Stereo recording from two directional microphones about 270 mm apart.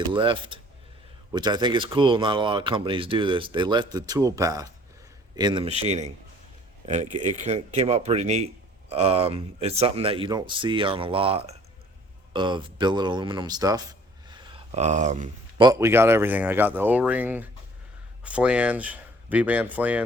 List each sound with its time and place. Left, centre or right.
0.1 s speech: centre
14.3 s a sound: centre
15.6 s speech: centre